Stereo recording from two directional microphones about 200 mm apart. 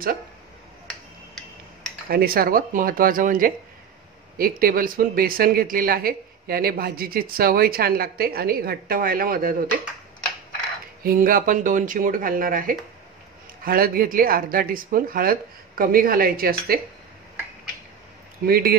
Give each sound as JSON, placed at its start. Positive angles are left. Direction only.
{"t": 2.0, "sound": "speech", "side_deg": -50}
{"t": 11.0, "sound": "speech", "side_deg": -45}
{"t": 18.5, "sound": "speech", "side_deg": -50}